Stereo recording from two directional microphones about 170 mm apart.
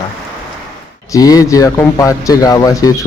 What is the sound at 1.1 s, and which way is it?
Speech, 20° left (ahead or behind).